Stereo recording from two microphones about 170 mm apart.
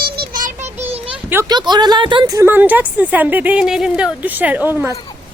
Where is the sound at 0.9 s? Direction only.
35° right (ahead or behind).